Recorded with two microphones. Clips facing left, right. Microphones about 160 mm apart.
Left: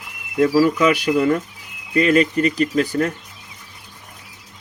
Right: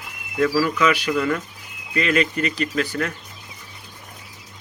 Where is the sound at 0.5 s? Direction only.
45° left (ahead or behind).